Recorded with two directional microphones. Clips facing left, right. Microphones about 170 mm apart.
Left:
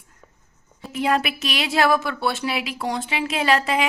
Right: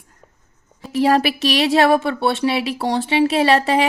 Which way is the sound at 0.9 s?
35° right (ahead or behind).